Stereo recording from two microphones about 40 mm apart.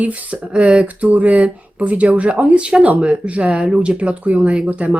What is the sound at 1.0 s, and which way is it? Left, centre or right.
Speech, right.